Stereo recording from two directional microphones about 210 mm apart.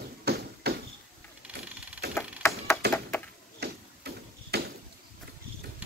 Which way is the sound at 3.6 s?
50° right (ahead or behind).